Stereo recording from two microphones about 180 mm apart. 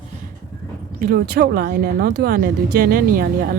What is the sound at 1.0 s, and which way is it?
Speech, 55° right (ahead or behind).